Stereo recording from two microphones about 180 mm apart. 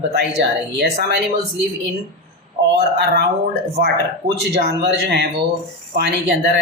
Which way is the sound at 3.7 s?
60° right (ahead or behind).